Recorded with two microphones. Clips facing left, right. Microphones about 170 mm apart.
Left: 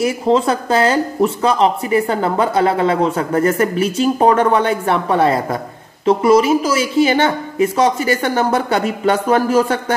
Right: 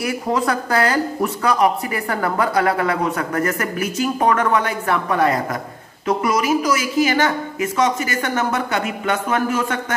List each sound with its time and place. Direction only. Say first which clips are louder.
0.0 s a woman's voice: left 6 dB; 25° left (ahead or behind)